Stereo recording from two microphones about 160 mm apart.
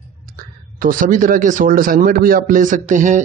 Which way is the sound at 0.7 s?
60° right (ahead or behind).